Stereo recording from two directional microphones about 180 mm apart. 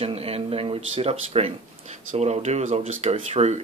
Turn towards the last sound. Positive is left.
turn(degrees=-35)  # may be behind; listen again after turning